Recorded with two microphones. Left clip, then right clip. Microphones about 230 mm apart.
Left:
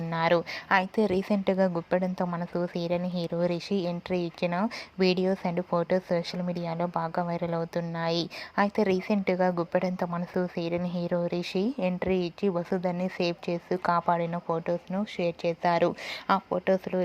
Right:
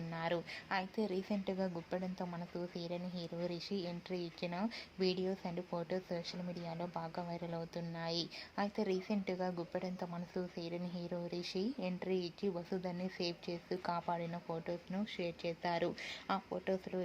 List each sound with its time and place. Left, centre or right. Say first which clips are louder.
0.1 s a woman's voice: left 15 dB; left